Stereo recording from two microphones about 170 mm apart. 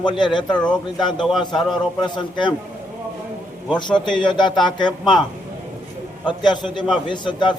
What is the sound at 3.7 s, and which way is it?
A man's voice, 25° left (ahead or behind).